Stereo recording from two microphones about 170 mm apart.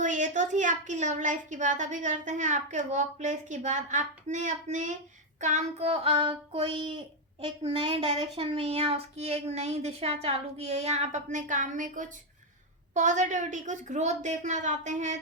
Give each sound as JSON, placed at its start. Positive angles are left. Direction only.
{"t": 0.0, "sound": "a woman's voice", "side_deg": -45}